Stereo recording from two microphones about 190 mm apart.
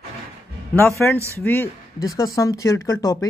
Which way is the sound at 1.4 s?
10° left (ahead or behind).